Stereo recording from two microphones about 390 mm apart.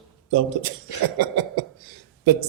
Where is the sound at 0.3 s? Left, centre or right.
Right.